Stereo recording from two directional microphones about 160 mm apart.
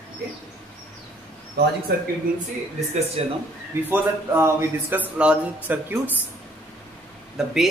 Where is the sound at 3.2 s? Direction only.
40° right (ahead or behind).